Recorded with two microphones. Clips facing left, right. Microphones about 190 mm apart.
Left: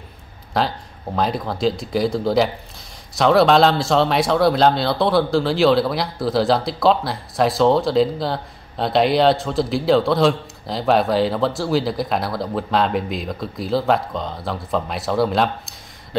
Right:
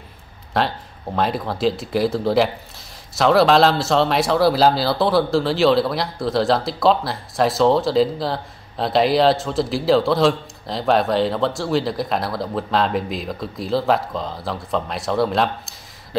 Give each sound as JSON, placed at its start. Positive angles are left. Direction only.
{"t": 0.5, "sound": "speech", "side_deg": 0}